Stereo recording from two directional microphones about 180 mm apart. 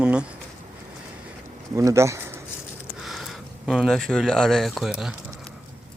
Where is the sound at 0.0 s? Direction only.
5° right (ahead or behind).